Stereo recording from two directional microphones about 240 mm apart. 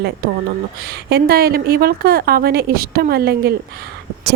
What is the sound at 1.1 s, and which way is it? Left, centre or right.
A woman's voice, right.